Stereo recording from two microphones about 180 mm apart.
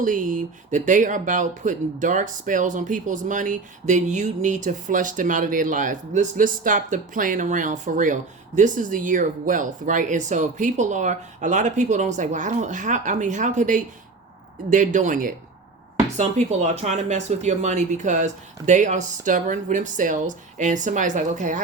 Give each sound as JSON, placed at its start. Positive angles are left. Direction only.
{"t": 0.0, "sound": "speech", "side_deg": -45}